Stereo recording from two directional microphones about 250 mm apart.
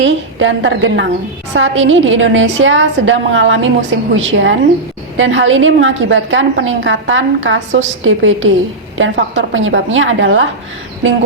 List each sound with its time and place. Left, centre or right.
0.0 s a woman's voice: right